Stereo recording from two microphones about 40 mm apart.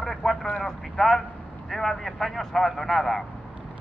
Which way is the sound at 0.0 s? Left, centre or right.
Centre.